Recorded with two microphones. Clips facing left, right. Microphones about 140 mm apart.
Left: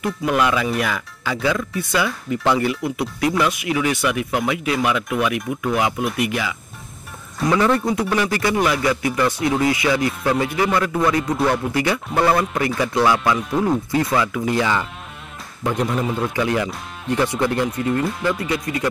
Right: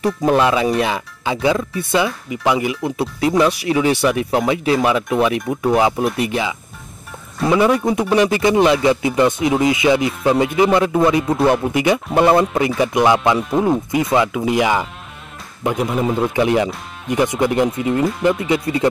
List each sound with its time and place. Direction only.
0.0 s speech: 35° right (ahead or behind)
7.6 s speech: 15° right (ahead or behind)
15.7 s speech: 5° right (ahead or behind)
16.2 s speech: 25° right (ahead or behind)
17.7 s speech: 5° right (ahead or behind)
18.5 s speech: 25° right (ahead or behind)